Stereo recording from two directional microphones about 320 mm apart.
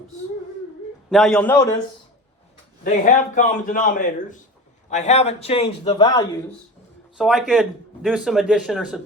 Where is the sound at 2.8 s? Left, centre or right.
Left.